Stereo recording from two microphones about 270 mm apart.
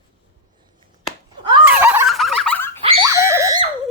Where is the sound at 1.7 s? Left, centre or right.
Centre.